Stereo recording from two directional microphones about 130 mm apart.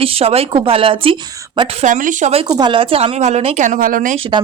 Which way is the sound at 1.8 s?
85° right.